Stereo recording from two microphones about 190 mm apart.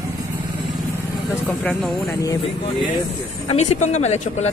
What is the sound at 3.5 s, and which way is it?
Speech, 35° left (ahead or behind).